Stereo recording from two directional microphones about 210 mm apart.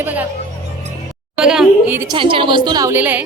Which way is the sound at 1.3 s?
5° right (ahead or behind).